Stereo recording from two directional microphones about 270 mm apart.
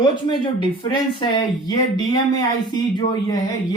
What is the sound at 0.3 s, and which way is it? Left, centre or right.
Speech, centre.